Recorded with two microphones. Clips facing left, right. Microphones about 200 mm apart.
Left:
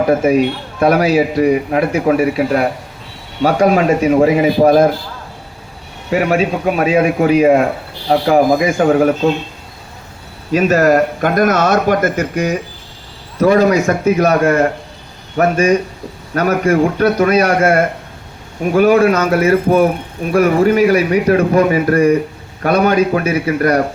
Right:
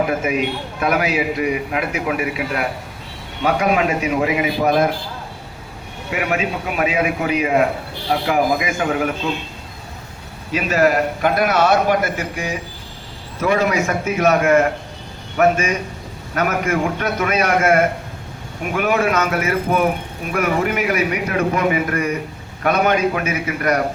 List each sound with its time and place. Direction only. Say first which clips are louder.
0.1 s a man's voice: left 8 dB; 35° left (ahead or behind)
6.1 s a man's voice: left 7 dB; 35° left (ahead or behind)
10.5 s a man's voice: left 6 dB; 45° left (ahead or behind)